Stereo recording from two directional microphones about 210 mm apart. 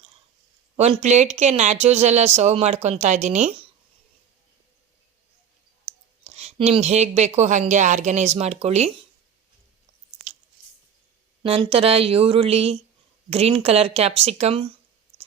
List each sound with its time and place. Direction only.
0.8 s speech: 30° right (ahead or behind)
6.2 s speech: 30° right (ahead or behind)
10.2 s chewing: 30° right (ahead or behind)
11.4 s speech: 25° right (ahead or behind)